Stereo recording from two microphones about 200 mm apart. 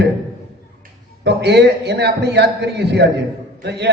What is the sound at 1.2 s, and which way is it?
A man's voice, 55° right (ahead or behind).